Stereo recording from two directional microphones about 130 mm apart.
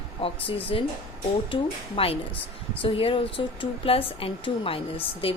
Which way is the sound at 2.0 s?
45° left (ahead or behind).